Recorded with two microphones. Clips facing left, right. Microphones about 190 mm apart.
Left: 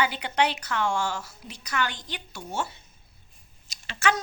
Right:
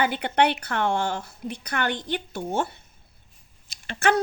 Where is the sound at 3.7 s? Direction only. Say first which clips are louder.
Right 4 dB; 55° right (ahead or behind).